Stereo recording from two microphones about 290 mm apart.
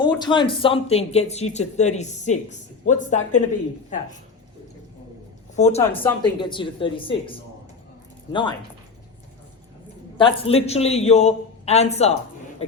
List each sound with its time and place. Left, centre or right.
0.0 s speech: centre
5.5 s speech: left
6.0 s speech: centre
10.2 s speech: centre